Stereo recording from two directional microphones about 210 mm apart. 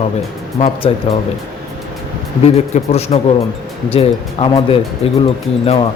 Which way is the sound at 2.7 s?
30° left (ahead or behind).